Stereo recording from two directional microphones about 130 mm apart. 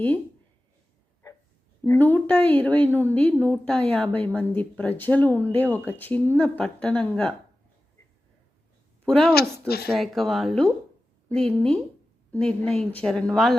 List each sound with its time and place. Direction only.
1.2 s a sound: 30° left (ahead or behind)
1.8 s speech: 15° left (ahead or behind)
9.0 s a woman's voice: 5° left (ahead or behind)